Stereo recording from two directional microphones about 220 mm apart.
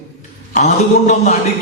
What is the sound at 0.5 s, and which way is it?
Mantra, 30° left (ahead or behind).